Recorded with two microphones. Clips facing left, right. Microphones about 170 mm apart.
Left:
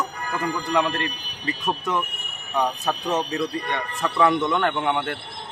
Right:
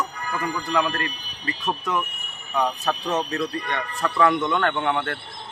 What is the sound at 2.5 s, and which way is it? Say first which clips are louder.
Speech: even; 10° left (ahead or behind).